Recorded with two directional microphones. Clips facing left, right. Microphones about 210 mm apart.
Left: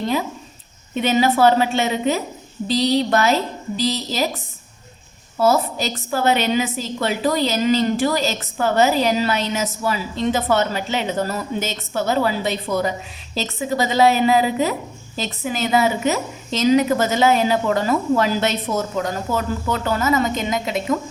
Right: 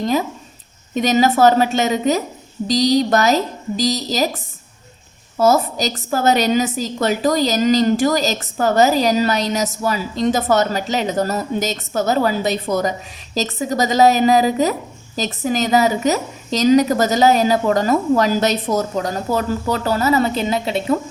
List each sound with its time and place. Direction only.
0.9 s a woman's voice: 40° right (ahead or behind)
5.4 s a woman's voice: 40° right (ahead or behind)